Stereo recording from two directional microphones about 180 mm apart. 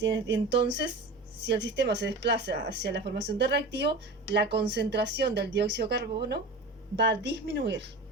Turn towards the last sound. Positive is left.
turn(degrees=-80)